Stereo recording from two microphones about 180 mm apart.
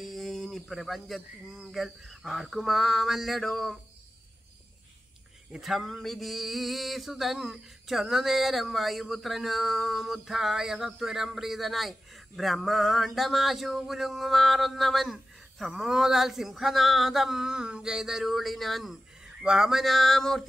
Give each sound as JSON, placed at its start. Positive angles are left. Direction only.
{"t": 0.0, "sound": "male singing", "side_deg": 0}
{"t": 5.5, "sound": "male singing", "side_deg": 0}